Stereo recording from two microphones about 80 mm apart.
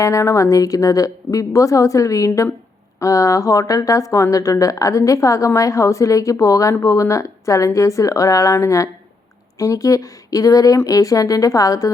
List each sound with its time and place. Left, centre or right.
0.0 s a woman's voice: left